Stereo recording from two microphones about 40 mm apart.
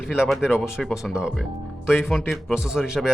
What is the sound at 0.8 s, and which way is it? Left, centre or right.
Speech, centre.